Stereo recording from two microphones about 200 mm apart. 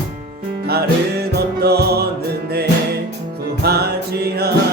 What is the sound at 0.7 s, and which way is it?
Music, 50° right (ahead or behind).